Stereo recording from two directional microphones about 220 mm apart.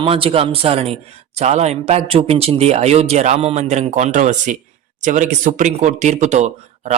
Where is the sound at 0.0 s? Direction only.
25° right (ahead or behind).